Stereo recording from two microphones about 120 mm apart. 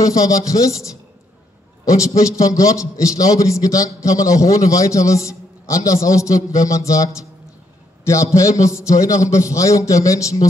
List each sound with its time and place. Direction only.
0.0 s a man's voice: 30° left (ahead or behind)
1.9 s a man's voice: 25° left (ahead or behind)